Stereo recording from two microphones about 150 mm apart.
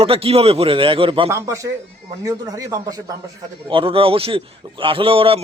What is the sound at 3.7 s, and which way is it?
Speech, 35° right (ahead or behind).